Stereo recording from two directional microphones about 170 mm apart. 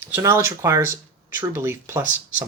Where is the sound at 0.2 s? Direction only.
15° right (ahead or behind).